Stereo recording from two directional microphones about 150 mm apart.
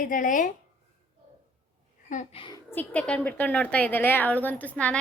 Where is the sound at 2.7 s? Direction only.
10° left (ahead or behind).